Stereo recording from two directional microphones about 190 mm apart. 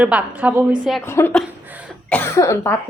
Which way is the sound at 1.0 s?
10° left (ahead or behind).